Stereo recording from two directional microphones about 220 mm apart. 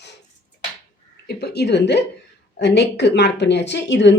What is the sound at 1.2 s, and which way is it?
Speech, 50° left (ahead or behind).